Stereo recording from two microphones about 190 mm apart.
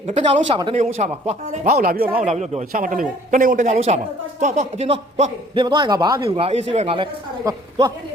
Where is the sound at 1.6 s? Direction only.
50° right (ahead or behind).